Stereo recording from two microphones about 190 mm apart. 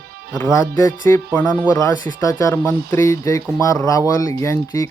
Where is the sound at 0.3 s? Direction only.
15° left (ahead or behind).